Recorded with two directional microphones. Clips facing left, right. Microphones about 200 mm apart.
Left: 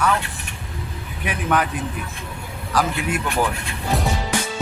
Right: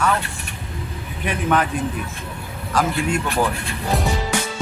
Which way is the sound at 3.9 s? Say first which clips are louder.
Even; centre (ahead or behind).